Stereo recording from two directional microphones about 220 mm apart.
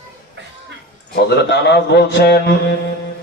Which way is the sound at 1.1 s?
50° left (ahead or behind).